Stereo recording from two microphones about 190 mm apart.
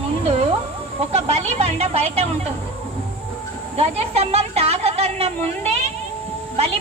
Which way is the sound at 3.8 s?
35° right (ahead or behind).